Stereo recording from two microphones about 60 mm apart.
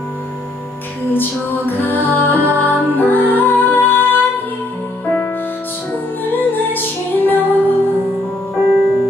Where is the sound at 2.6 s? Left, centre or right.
Left.